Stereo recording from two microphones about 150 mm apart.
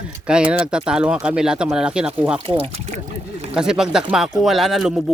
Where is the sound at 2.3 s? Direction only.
35° right (ahead or behind).